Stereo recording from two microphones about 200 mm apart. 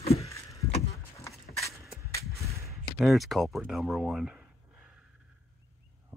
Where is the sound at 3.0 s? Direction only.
Centre (ahead or behind).